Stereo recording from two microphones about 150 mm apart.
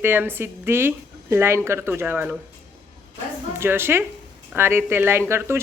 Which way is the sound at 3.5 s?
15° right (ahead or behind).